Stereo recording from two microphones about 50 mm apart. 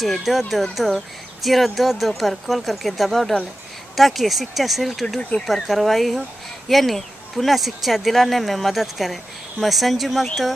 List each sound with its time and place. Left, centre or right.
0.0 s speech: centre
5.3 s speech: left
5.7 s speech: centre